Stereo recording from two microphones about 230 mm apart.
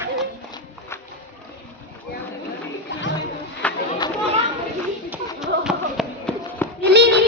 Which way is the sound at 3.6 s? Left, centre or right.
Centre.